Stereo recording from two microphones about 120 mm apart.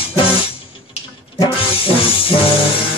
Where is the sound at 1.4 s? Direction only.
50° left (ahead or behind).